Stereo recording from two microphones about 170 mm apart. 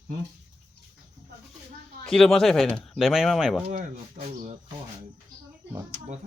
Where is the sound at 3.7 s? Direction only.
40° right (ahead or behind).